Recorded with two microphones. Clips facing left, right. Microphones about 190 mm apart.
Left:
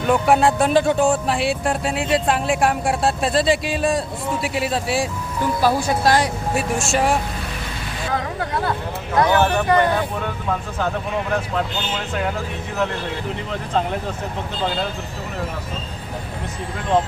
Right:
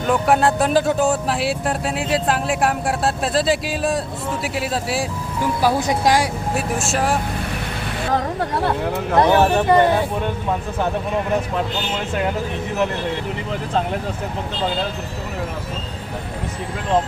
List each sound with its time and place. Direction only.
0.0 s speech: centre (ahead or behind)
5.6 s speech: 15° right (ahead or behind)
9.1 s speech: 30° right (ahead or behind)